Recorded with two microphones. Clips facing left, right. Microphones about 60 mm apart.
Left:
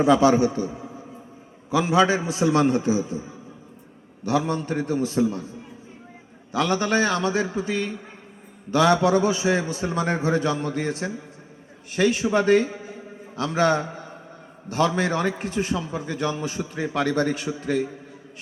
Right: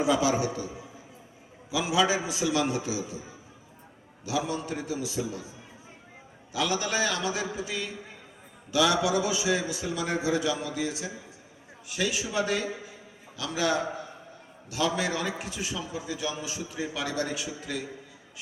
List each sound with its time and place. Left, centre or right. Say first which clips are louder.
0.0 s a man's voice: left 8 dB; left
4.2 s a man's voice: left 6 dB; left